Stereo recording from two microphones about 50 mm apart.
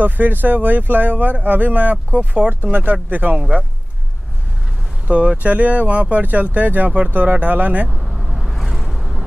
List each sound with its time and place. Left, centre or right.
0.0 s speech: right
2.1 s speech: right
2.6 s speech: right
3.3 s speech: right
5.0 s speech: right
8.1 s vehicle: centre
8.4 s vehicle: centre